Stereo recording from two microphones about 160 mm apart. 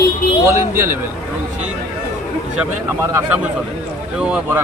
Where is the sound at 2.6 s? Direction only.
10° right (ahead or behind).